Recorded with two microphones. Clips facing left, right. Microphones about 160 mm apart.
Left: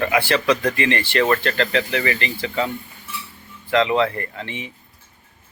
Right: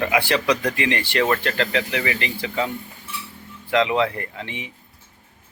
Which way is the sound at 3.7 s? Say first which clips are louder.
Left 2 dB; 10° right (ahead or behind).